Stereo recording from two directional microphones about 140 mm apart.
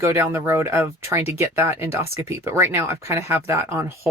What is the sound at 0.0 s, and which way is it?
Speech, 15° right (ahead or behind).